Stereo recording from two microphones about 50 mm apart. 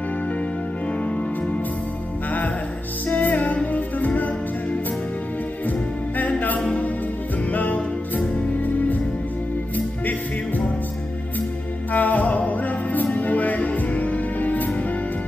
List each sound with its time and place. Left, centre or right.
3.1 s music: left
5.7 s music: left
7.5 s music: left
11.9 s music: left